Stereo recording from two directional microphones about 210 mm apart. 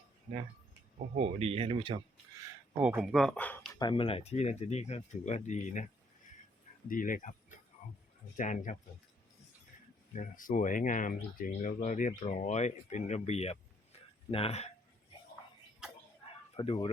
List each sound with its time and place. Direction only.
1.1 s speech: 30° right (ahead or behind)
2.7 s speech: 10° right (ahead or behind); by 3.7 s 5° left (ahead or behind)
3.8 s speech: 25° left (ahead or behind)
6.8 s speech: 40° left (ahead or behind)
8.4 s speech: 35° left (ahead or behind)
10.2 s speech: 40° left (ahead or behind)
16.6 s speech: 25° left (ahead or behind)